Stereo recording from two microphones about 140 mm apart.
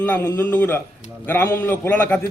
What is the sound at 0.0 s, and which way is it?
A man's voice, 15° left (ahead or behind).